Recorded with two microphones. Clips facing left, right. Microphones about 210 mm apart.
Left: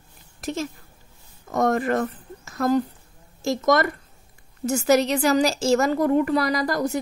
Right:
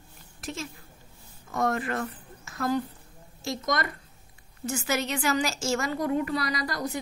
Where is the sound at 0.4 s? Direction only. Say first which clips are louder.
Left 8 dB; 40° left (ahead or behind).